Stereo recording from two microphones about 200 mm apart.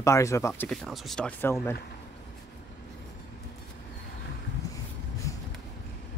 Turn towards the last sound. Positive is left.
turn(degrees=15)  # may be behind; listen again after turning